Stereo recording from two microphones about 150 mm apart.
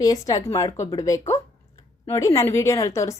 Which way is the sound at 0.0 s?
25° left (ahead or behind).